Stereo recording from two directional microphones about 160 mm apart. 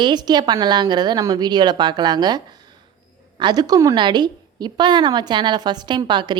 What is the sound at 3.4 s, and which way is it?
A woman's voice, 25° right (ahead or behind).